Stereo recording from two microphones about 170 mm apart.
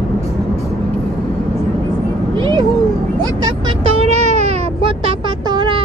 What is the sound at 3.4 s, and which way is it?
Vehicle, 25° right (ahead or behind).